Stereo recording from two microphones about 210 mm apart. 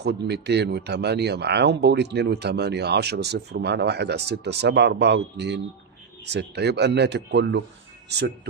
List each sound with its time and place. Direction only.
0.0 s speech: 55° right (ahead or behind)